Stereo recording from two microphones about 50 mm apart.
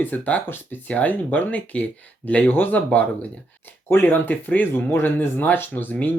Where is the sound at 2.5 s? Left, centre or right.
Left.